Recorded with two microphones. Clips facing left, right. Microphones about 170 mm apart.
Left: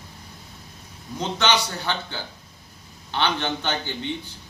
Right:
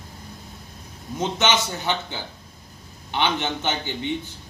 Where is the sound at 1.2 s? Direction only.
20° right (ahead or behind).